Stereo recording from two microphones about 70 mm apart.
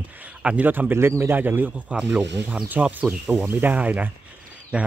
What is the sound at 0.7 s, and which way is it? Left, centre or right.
Speech, right.